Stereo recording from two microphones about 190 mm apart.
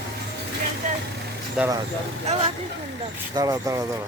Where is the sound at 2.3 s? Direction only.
35° right (ahead or behind).